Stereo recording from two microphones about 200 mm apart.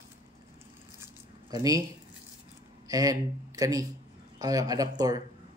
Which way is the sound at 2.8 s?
15° right (ahead or behind).